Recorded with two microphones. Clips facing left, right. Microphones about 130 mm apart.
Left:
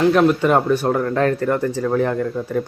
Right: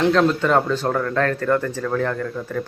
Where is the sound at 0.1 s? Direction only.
15° left (ahead or behind).